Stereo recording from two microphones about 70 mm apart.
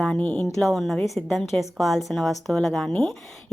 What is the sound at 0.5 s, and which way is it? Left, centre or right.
Speech, centre.